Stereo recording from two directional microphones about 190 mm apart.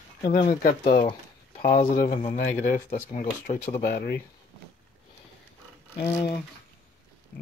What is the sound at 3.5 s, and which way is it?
Speech, 35° left (ahead or behind).